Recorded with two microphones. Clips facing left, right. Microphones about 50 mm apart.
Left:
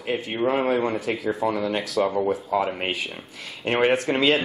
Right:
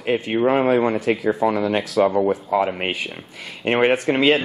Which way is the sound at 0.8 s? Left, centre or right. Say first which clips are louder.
Right 5 dB; centre.